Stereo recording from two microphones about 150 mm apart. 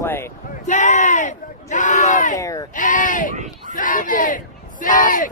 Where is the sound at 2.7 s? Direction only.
60° left (ahead or behind).